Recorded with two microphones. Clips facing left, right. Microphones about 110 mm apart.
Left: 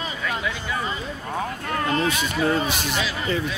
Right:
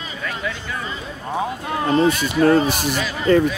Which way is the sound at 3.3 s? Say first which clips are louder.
Right 13 dB; 45° right (ahead or behind).